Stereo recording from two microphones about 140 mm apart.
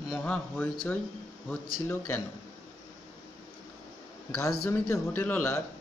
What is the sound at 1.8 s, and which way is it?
Speech, 15° left (ahead or behind).